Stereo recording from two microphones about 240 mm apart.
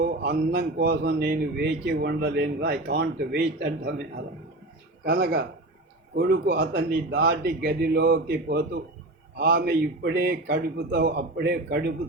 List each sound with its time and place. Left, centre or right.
0.0 s a man's voice: right
5.0 s a man's voice: right